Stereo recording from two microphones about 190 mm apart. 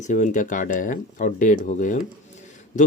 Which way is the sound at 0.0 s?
40° left (ahead or behind).